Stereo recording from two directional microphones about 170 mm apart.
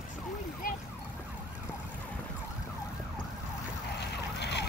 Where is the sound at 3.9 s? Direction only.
80° left.